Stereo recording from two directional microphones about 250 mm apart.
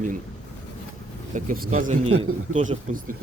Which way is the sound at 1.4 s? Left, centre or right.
Right.